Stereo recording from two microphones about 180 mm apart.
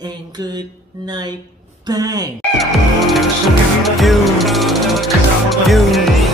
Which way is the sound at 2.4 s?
Centre (ahead or behind).